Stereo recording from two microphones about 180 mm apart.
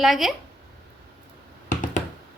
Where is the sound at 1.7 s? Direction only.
45° left (ahead or behind).